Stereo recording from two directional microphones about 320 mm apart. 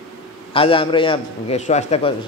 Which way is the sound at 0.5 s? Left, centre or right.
Centre.